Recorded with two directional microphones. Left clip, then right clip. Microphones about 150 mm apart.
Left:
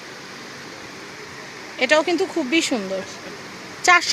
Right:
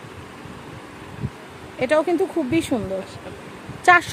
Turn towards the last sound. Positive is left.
turn(degrees=-25)  # may be behind; listen again after turning